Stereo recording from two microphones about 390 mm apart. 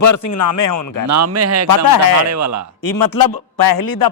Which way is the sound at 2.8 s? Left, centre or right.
Left.